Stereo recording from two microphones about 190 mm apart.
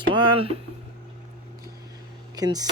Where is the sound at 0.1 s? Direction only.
25° right (ahead or behind).